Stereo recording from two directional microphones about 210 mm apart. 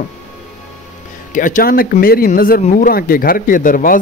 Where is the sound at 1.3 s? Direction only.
40° left (ahead or behind).